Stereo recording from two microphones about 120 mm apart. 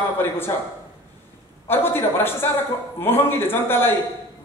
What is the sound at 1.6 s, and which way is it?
A man's voice, 20° left (ahead or behind).